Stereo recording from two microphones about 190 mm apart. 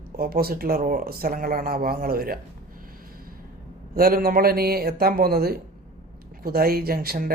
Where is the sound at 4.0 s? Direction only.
50° right (ahead or behind).